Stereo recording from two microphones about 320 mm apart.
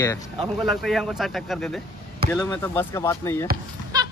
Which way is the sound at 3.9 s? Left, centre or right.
Centre.